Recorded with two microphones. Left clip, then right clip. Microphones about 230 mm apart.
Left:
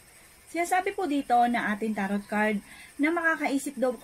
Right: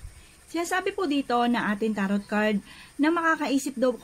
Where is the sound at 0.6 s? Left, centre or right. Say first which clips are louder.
Even; right.